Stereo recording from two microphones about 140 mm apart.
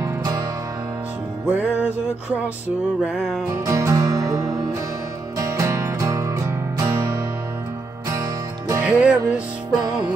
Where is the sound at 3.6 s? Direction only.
20° right (ahead or behind).